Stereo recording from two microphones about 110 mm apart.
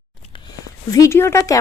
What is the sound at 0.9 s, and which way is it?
Speech, 30° left (ahead or behind).